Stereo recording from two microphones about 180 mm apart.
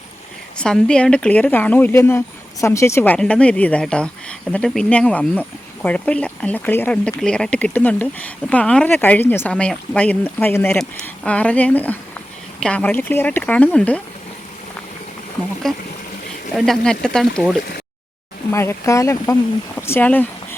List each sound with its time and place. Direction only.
0.6 s speech: 5° left (ahead or behind)
15.6 s speech: centre (ahead or behind)
18.5 s speech: 15° left (ahead or behind)